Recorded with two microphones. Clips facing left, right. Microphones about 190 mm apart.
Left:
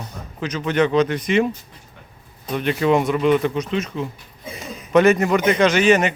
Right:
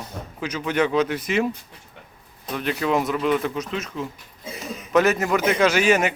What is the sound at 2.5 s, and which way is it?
A man's voice, centre (ahead or behind).